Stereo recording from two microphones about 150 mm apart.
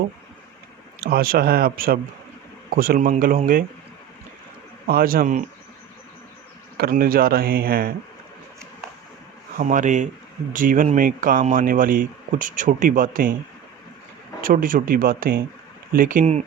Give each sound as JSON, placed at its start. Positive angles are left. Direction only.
{"t": 1.0, "sound": "speech", "side_deg": -80}
{"t": 4.9, "sound": "speech", "side_deg": -75}
{"t": 6.7, "sound": "speech", "side_deg": -85}
{"t": 9.6, "sound": "speech", "side_deg": -60}
{"t": 14.4, "sound": "speech", "side_deg": -65}